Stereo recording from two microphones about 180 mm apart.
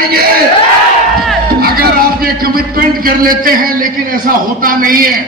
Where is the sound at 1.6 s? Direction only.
55° right (ahead or behind).